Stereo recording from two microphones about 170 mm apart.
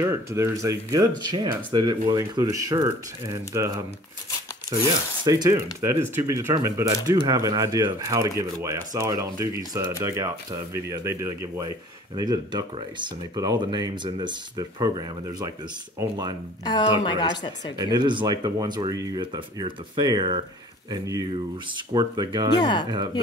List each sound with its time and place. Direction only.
0.0 s speech: 15° right (ahead or behind)
5.2 s speech: 20° right (ahead or behind)
16.6 s a woman's voice: 25° left (ahead or behind)
17.7 s speech: 25° right (ahead or behind)
22.6 s a woman's voice: 25° left (ahead or behind)